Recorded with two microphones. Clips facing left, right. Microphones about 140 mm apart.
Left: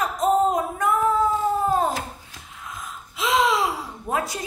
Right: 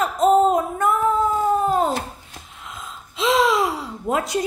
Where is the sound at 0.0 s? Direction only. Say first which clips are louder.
Right 4 dB; 25° right (ahead or behind).